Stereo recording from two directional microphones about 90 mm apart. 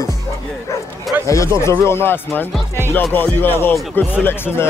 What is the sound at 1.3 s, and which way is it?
Speech, 35° left (ahead or behind).